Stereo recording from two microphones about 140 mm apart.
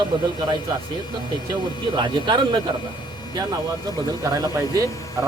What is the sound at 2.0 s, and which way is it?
Speech, 35° right (ahead or behind).